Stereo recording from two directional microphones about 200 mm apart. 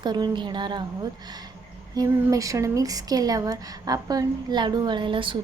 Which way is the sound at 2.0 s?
15° right (ahead or behind).